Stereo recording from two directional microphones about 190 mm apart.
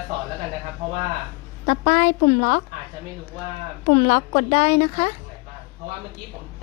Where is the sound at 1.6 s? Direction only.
50° left (ahead or behind).